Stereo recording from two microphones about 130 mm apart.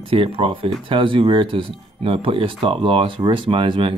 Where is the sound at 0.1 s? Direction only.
45° right (ahead or behind).